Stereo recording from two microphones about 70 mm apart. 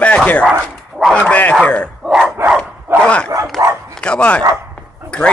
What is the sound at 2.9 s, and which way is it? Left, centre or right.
Speech, centre.